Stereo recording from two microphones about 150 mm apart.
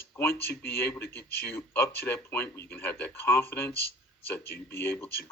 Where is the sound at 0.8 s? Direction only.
15° left (ahead or behind).